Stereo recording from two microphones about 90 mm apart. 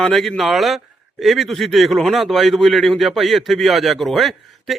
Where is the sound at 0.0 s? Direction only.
5° left (ahead or behind).